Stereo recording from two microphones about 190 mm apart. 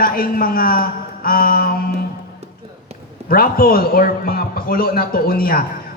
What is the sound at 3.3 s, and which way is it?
A man's voice, 50° left (ahead or behind).